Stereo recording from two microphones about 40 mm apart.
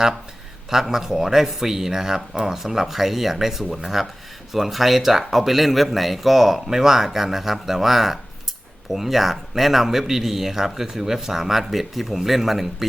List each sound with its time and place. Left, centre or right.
0.7 s speech: centre